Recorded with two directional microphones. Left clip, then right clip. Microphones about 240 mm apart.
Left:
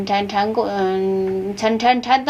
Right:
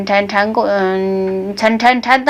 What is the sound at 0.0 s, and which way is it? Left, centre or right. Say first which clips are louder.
A woman's voice: right 5 dB; right.